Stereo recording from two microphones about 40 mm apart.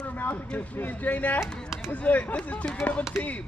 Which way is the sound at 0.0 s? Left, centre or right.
Left.